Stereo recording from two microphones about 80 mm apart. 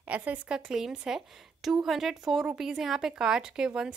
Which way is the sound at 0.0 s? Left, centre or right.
Right.